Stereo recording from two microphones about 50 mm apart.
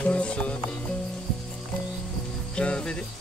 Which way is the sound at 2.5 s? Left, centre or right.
Left.